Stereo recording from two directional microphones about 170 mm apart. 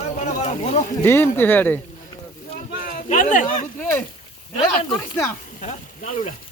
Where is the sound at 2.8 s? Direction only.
55° left (ahead or behind).